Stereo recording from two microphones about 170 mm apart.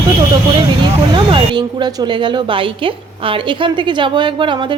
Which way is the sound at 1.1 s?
25° right (ahead or behind).